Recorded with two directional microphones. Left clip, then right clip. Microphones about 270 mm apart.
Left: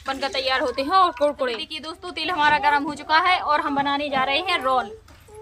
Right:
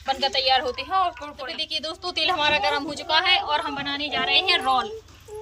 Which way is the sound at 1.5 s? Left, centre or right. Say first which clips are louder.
Right 3 dB; centre.